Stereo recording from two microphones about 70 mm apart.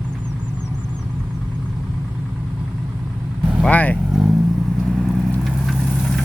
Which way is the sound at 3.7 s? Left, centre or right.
Left.